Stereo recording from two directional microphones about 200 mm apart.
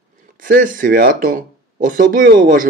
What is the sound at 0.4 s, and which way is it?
Speech, 45° right (ahead or behind).